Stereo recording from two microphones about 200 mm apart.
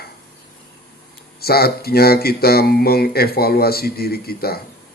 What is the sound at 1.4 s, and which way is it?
Speech, 50° left (ahead or behind).